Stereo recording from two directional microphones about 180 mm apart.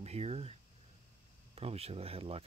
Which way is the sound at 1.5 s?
35° right (ahead or behind).